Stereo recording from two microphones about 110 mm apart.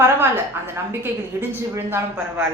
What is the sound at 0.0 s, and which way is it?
A woman's voice, 20° right (ahead or behind).